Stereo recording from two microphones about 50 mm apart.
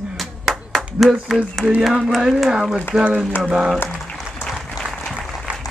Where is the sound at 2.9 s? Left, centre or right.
Right.